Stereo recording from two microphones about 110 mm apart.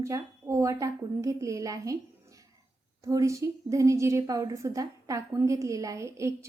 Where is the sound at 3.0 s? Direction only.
30° right (ahead or behind).